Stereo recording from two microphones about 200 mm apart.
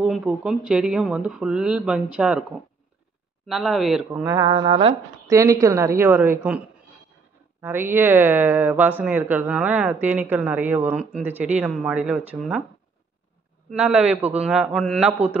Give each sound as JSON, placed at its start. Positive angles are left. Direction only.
{"t": 0.0, "sound": "speech", "side_deg": -5}
{"t": 3.4, "sound": "speech", "side_deg": 0}
{"t": 4.1, "sound": "speech", "side_deg": -15}
{"t": 7.6, "sound": "speech", "side_deg": -10}
{"t": 13.7, "sound": "speech", "side_deg": -5}